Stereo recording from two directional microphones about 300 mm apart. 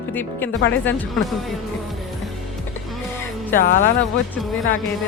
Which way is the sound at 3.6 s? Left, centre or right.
Left.